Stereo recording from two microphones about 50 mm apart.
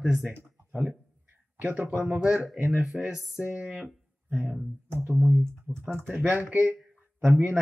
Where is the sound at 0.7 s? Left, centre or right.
Right.